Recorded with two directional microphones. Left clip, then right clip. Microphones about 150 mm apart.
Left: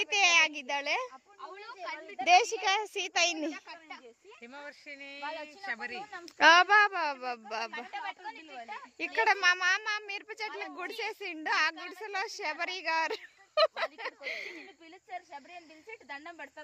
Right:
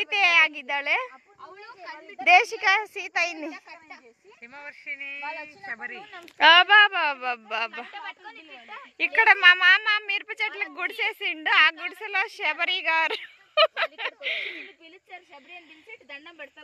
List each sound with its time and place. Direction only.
0.0 s a woman's voice: 15° left (ahead or behind)
1.6 s a woman's voice: 10° right (ahead or behind)
2.2 s speech: 10° left (ahead or behind)
2.9 s a child's voice: 35° left (ahead or behind)
4.6 s speech: 65° left (ahead or behind)
5.2 s a woman's voice: 5° left (ahead or behind)
5.7 s a child's voice: 40° left (ahead or behind)
6.3 s a woman's voice: 20° left (ahead or behind)